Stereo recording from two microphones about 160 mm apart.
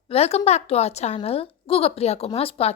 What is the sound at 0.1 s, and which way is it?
A woman's voice, 40° left (ahead or behind).